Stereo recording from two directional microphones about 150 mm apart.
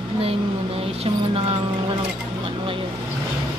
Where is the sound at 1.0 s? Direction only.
40° right (ahead or behind).